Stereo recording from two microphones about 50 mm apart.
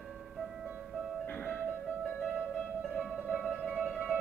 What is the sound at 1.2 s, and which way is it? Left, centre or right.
Music, left.